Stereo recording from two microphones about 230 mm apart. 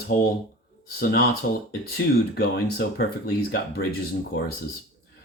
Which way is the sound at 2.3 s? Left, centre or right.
Left.